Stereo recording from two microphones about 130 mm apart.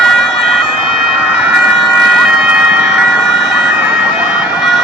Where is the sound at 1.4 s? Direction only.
10° right (ahead or behind).